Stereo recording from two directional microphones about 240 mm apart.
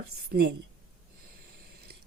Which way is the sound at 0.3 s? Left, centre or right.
Right.